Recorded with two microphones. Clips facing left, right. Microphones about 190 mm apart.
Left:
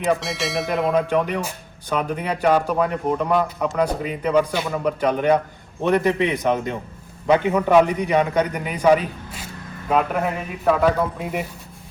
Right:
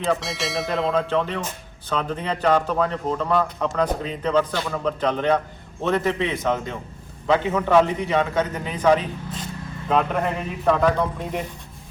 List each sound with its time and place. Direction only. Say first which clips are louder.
0.2 s a man's voice: left 2 dB; centre (ahead or behind)
0.9 s a man's voice: left 2 dB; 10° left (ahead or behind)